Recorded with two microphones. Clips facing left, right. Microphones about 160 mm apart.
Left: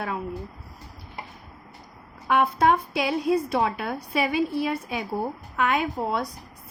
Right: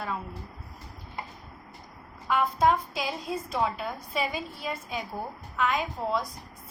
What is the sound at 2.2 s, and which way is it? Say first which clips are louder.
A woman's voice: left 3 dB; 65° left (ahead or behind).